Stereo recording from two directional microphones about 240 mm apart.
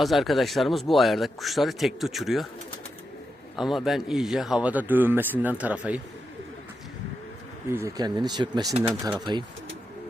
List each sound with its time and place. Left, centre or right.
0.0 s speech: centre
3.5 s speech: centre
7.7 s speech: centre